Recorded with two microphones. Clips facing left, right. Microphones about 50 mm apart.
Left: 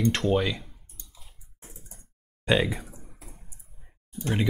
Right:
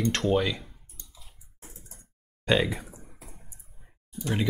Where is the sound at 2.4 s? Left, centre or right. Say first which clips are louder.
Left 1 dB; centre.